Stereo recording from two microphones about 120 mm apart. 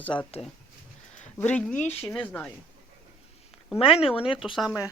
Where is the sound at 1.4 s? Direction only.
10° left (ahead or behind).